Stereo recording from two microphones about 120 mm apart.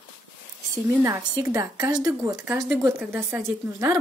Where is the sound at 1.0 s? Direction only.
25° right (ahead or behind).